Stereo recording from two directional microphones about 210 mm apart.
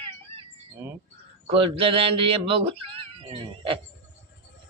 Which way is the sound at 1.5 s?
25° right (ahead or behind).